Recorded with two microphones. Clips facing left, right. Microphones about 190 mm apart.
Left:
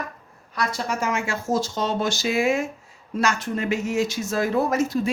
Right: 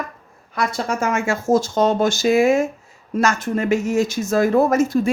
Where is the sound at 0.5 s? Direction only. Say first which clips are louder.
Right 4 dB; 50° right (ahead or behind).